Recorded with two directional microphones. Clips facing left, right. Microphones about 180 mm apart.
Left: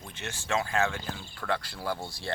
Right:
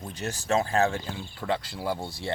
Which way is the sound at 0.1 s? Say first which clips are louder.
Right 5 dB; 40° right (ahead or behind).